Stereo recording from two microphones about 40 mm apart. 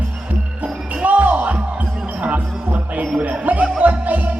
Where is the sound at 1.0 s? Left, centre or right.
Right.